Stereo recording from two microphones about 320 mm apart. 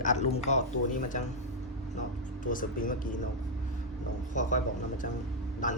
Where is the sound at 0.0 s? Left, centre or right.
Left.